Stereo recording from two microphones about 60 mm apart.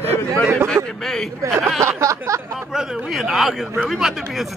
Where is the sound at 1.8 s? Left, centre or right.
Right.